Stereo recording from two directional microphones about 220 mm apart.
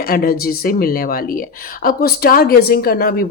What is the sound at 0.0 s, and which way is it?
Speech, 40° left (ahead or behind).